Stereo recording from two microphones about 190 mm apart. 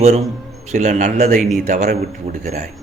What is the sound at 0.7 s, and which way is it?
Speech, 40° right (ahead or behind).